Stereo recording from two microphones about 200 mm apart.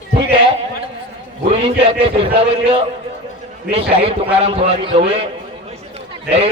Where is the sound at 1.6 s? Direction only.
30° right (ahead or behind).